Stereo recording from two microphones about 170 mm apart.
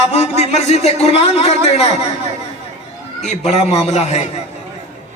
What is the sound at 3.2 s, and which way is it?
A man's voice, 40° left (ahead or behind).